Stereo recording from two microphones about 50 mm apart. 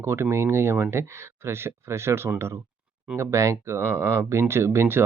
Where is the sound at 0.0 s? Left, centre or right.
Right.